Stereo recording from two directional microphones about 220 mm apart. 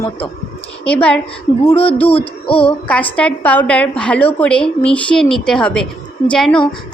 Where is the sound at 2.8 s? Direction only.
5° left (ahead or behind).